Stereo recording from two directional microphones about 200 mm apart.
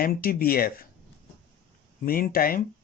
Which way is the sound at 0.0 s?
50° left (ahead or behind).